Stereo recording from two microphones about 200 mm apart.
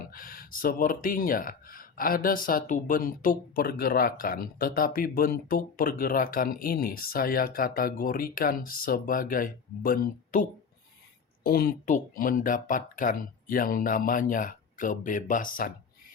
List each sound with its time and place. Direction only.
0.1 s speech: 45° left (ahead or behind)
11.4 s speech: 50° left (ahead or behind)